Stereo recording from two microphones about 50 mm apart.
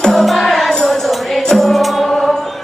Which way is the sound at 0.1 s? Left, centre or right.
Centre.